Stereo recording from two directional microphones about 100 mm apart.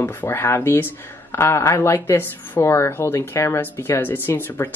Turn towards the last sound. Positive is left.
turn(degrees=20)  # may be behind; listen again after turning